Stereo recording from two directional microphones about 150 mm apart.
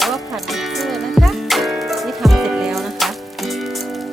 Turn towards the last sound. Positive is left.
turn(degrees=0)  # may be behind; listen again after turning